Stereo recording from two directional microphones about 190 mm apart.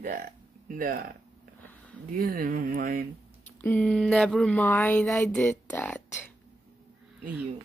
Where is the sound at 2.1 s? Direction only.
50° right (ahead or behind).